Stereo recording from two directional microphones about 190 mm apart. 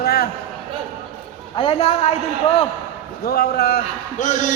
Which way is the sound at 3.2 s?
55° left (ahead or behind).